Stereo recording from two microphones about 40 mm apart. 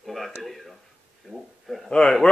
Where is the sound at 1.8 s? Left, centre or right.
Centre.